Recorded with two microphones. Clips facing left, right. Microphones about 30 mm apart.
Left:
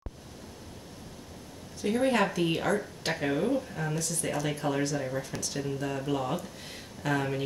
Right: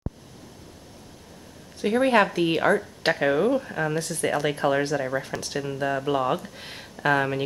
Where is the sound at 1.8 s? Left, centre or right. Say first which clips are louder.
Right 6 dB; right.